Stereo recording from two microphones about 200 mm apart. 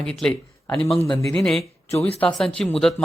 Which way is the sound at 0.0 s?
5° left (ahead or behind).